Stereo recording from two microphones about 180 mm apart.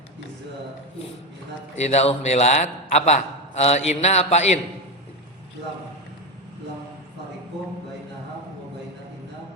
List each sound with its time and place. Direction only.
1.7 s a man's voice: 40° left (ahead or behind)